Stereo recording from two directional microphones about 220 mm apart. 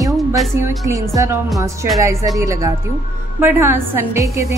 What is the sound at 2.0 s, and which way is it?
A woman's voice, 15° right (ahead or behind).